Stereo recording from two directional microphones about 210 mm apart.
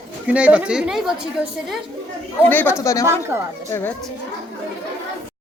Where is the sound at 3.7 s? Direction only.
10° left (ahead or behind).